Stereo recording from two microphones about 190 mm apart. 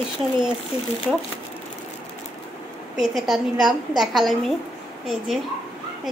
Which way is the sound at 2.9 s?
Centre (ahead or behind).